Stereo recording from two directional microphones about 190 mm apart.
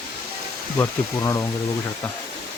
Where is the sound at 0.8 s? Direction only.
15° left (ahead or behind).